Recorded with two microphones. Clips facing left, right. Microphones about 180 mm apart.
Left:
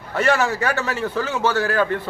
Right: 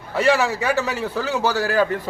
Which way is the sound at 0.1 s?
5° right (ahead or behind).